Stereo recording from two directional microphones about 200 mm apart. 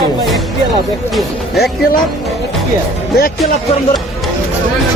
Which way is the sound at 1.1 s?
Centre (ahead or behind).